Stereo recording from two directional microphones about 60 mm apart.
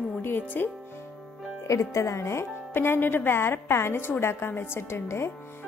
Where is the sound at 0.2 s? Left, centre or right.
Left.